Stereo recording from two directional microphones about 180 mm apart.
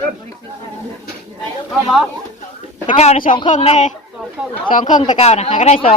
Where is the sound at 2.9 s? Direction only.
35° left (ahead or behind).